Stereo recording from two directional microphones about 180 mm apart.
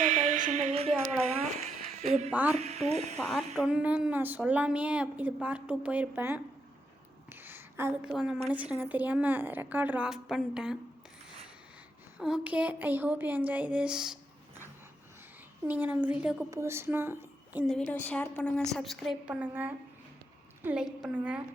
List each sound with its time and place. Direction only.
0.0 s a sound: 45° right (ahead or behind)
2.3 s a woman's voice: 10° right (ahead or behind)
2.6 s speech: 35° right (ahead or behind)
3.2 s a woman's voice: centre (ahead or behind)
7.3 s a sound: 10° right (ahead or behind)
8.1 s a woman's voice: 5° right (ahead or behind)
12.1 s a woman's voice: 5° right (ahead or behind)
15.6 s a woman's voice: 10° right (ahead or behind)
17.7 s a woman's voice: 10° left (ahead or behind)